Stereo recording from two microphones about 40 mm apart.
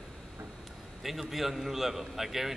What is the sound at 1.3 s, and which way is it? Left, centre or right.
A man's voice, centre.